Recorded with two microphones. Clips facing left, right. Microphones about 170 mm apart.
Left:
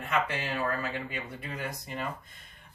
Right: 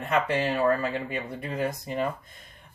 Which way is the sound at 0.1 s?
45° right (ahead or behind).